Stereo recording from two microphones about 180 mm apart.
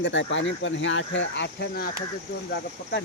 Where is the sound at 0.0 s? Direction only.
90° left; by 1.9 s 65° left (ahead or behind).